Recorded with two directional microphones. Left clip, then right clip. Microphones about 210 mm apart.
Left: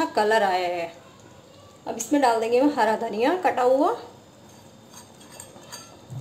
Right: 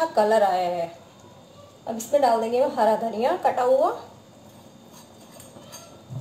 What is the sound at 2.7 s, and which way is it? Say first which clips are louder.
A woman's voice: right 1 dB; 45° left (ahead or behind).